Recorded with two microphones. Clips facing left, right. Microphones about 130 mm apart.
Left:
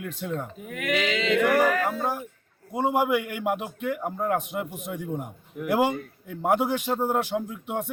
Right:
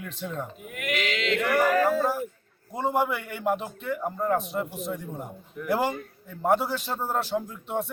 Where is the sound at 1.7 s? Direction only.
35° right (ahead or behind).